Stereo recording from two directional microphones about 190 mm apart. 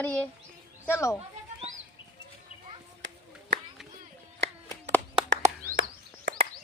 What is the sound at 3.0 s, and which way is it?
Clapping, 80° right.